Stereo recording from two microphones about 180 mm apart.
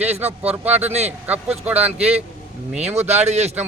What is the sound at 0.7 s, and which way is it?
Speech, 35° right (ahead or behind).